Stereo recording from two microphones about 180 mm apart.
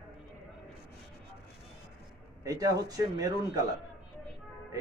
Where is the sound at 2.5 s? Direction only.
20° right (ahead or behind).